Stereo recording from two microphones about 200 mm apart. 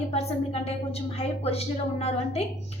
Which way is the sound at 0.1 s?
30° left (ahead or behind).